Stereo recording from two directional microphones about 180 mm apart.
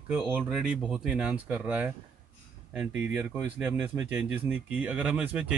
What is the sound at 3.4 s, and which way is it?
Speech, 5° right (ahead or behind).